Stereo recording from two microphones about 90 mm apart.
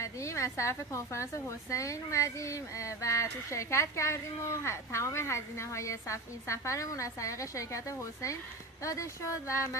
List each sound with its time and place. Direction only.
0.0 s a woman's voice: 35° left (ahead or behind)